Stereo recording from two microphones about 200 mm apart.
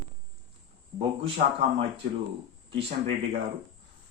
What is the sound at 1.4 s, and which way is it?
Speech, 45° right (ahead or behind).